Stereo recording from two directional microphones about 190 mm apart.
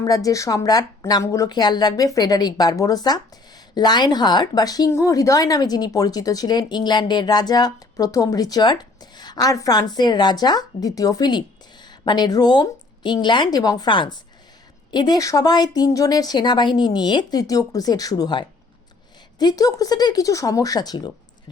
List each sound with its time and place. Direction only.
0.0 s speech: 20° left (ahead or behind)